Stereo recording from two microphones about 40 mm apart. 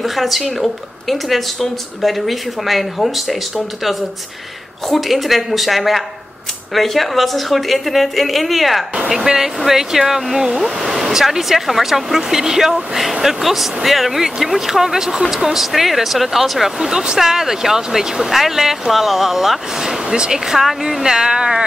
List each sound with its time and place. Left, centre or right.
0.0 s speech: centre
9.1 s speech: centre
21.0 s speech: centre